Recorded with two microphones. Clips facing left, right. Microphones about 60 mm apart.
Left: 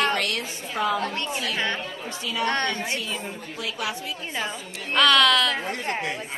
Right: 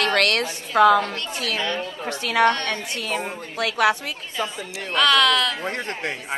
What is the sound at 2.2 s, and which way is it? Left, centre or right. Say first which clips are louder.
Speech: right 9 dB; right.